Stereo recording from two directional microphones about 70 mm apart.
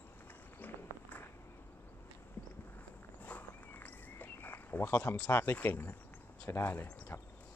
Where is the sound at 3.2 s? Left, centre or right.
Left.